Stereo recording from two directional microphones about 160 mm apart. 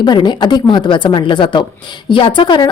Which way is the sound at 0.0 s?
30° left (ahead or behind).